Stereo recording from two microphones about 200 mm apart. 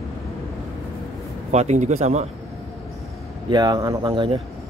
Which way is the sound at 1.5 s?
35° right (ahead or behind).